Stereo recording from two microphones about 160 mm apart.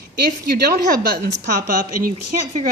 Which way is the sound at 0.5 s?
75° right (ahead or behind).